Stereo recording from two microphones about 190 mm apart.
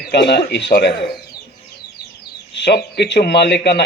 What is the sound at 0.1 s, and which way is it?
Speech, 60° left (ahead or behind).